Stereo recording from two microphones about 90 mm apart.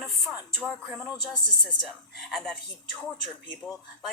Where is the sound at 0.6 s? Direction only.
10° right (ahead or behind).